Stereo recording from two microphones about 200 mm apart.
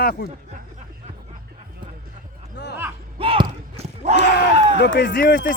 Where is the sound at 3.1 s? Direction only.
25° right (ahead or behind).